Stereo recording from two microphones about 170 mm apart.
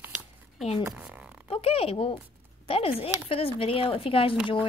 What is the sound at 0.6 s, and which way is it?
Speech, 35° left (ahead or behind).